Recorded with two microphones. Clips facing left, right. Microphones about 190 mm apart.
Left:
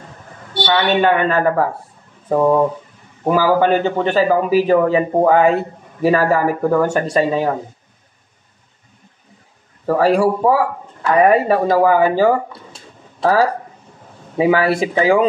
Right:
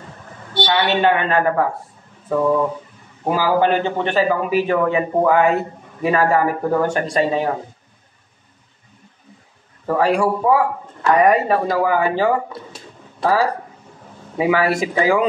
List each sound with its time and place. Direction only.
0.8 s a man's voice: 45° left (ahead or behind)
9.8 s a man's voice: 40° left (ahead or behind)
11.1 s a man's voice: 30° left (ahead or behind)
11.5 s speech: 50° left (ahead or behind)
14.3 s a man's voice: 30° left (ahead or behind)